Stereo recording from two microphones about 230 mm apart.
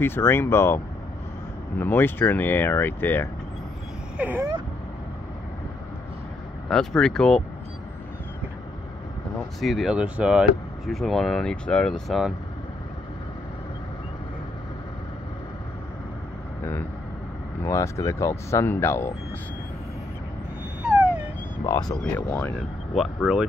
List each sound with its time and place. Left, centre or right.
0.0 s speech: centre
1.8 s speech: centre
4.2 s vehicle: centre
6.7 s speech: centre
9.6 s speech: centre
17.6 s speech: centre
20.8 s a sound: centre
21.6 s speech: centre